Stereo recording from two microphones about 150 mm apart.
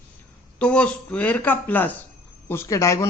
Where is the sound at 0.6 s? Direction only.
5° left (ahead or behind).